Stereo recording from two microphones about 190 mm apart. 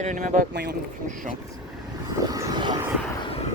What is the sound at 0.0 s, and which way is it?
Speech, 40° right (ahead or behind).